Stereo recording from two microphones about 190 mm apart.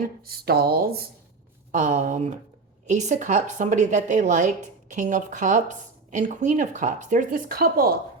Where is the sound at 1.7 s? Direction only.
40° right (ahead or behind).